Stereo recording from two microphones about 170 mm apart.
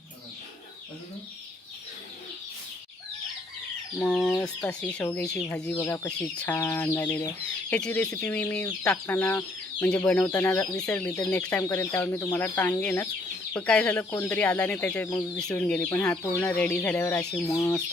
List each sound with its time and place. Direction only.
3.9 s speech: 10° left (ahead or behind)
17.4 s speech: 20° left (ahead or behind)